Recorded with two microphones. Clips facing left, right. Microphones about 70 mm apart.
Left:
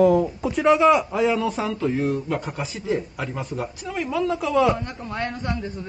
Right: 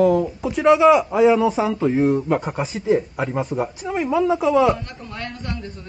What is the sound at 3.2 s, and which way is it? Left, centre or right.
Speech, right.